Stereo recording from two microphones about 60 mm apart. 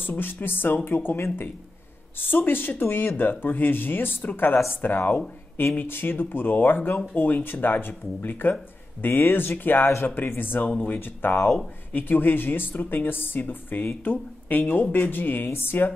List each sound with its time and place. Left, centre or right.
0.0 s speech: left